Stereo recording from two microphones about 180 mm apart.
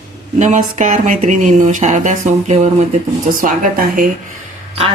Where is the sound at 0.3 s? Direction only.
40° right (ahead or behind).